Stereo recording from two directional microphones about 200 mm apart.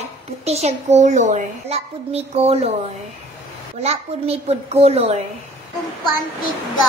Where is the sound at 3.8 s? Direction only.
30° right (ahead or behind).